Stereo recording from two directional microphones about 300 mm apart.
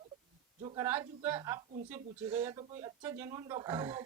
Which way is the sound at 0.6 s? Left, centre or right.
Centre.